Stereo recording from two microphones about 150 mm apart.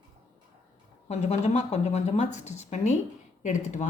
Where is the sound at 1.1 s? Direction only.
45° left (ahead or behind).